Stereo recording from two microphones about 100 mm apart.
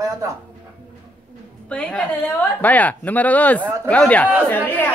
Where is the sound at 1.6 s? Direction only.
10° left (ahead or behind).